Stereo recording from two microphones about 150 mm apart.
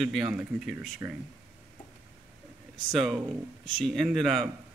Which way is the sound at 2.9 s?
5° right (ahead or behind).